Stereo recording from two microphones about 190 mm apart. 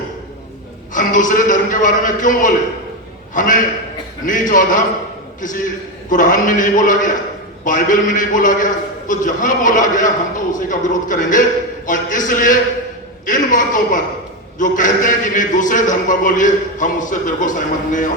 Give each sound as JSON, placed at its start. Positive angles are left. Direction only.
{"t": 0.9, "sound": "a man's voice", "side_deg": 45}